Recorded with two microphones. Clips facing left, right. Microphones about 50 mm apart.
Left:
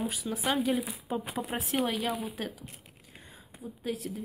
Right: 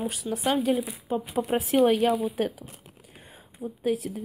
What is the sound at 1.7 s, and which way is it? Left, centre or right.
Speech, right.